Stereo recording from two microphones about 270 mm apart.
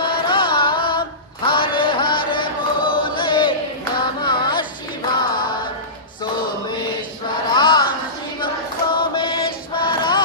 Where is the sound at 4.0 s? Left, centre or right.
Centre.